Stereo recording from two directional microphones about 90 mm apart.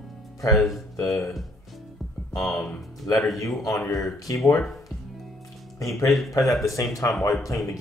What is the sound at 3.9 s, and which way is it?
Speech, centre (ahead or behind).